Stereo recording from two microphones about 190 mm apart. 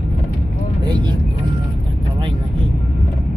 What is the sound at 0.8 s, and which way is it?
Vehicle, 25° right (ahead or behind).